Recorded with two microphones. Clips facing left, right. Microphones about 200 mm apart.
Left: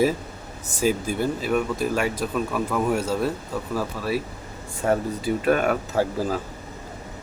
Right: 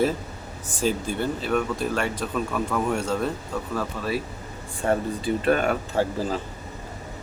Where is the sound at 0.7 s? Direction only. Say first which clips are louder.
Left 2 dB; 10° left (ahead or behind).